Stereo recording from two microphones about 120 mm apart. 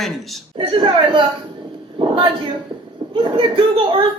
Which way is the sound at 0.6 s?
45° right (ahead or behind).